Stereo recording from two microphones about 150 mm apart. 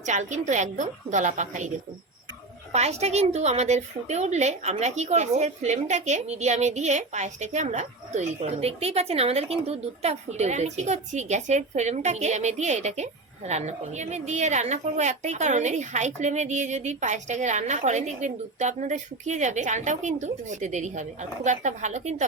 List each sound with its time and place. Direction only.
0.0 s a woman's voice: 50° right (ahead or behind)
2.7 s a woman's voice: 45° right (ahead or behind)